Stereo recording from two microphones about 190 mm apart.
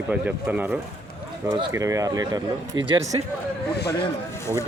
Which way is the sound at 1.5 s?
20° right (ahead or behind).